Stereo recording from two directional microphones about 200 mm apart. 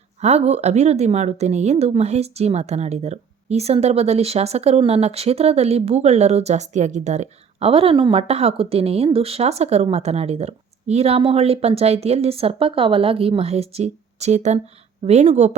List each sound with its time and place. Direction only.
0.2 s a woman's voice: 35° right (ahead or behind)